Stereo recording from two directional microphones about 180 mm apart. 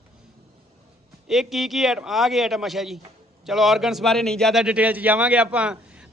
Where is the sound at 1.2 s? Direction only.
Centre (ahead or behind).